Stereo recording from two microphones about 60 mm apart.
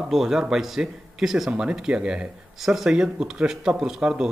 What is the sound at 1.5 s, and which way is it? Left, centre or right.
A man's voice, centre.